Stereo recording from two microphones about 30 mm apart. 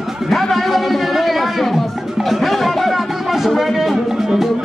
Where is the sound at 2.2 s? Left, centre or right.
Centre.